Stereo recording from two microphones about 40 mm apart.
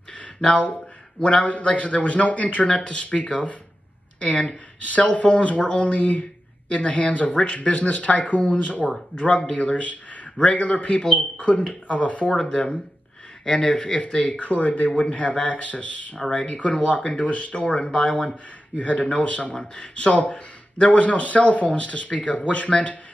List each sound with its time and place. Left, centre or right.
0.2 s speech: left
2.7 s speech: left
12.4 s speech: left
14.4 s speech: left
18.8 s speech: left